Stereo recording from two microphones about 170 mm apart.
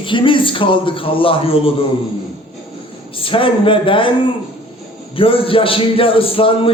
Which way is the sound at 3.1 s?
30° left (ahead or behind).